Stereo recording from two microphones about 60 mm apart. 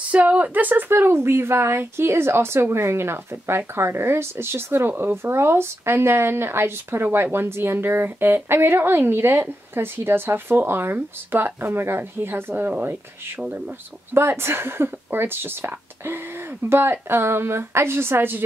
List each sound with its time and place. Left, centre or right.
0.1 s speech: right